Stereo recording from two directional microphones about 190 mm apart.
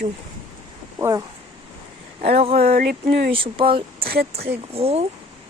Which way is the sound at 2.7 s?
55° right (ahead or behind).